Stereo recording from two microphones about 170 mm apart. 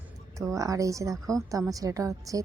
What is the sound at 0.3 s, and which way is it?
A woman's voice, 20° right (ahead or behind).